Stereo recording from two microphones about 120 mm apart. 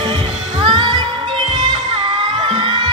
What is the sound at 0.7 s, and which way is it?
Music, 40° right (ahead or behind).